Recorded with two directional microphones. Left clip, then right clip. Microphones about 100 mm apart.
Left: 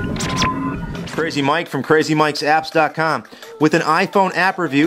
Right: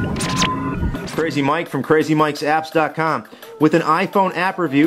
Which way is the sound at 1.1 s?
35° left (ahead or behind).